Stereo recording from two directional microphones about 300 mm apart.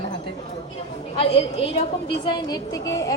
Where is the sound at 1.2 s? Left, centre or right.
Centre.